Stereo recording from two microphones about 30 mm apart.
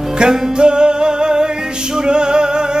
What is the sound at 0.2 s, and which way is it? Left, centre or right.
Music, right.